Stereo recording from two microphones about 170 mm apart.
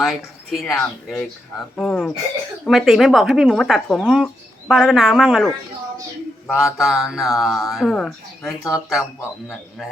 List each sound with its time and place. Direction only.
0.0 s speech: centre (ahead or behind)
6.7 s speech: 5° right (ahead or behind)